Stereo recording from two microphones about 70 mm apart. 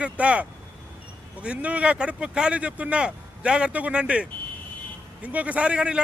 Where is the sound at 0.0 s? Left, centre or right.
Centre.